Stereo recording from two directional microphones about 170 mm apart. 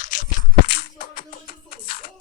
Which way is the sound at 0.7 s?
65° left (ahead or behind).